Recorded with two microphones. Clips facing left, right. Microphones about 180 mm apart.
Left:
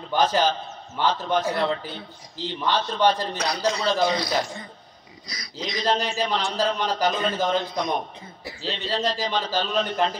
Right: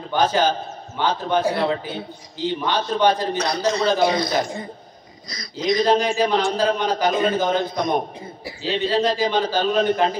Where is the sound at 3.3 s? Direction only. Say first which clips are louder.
Right 4 dB; 10° left (ahead or behind).